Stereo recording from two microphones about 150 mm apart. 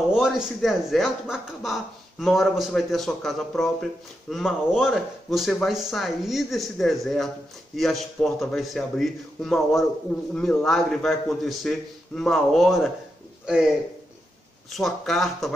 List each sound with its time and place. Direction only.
0.1 s speech: 5° right (ahead or behind)
14.7 s speech: centre (ahead or behind)